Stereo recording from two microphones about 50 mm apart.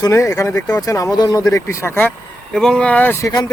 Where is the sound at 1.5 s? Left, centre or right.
Left.